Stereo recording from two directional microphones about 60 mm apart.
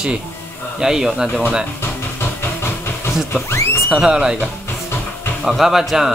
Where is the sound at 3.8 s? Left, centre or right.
Centre.